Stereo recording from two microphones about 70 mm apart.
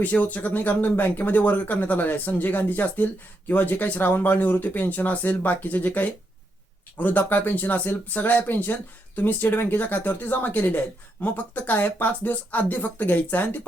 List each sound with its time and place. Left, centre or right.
0.0 s speech: left